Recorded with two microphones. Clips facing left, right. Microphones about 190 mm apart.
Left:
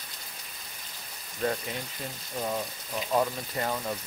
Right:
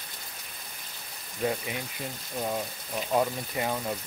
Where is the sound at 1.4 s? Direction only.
10° right (ahead or behind).